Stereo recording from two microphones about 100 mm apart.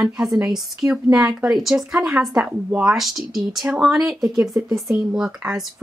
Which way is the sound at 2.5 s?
15° right (ahead or behind).